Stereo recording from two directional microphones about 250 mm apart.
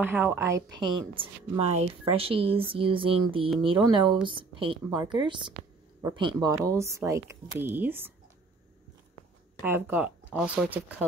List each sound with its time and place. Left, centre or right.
0.0 s a woman's voice: centre
9.6 s speech: centre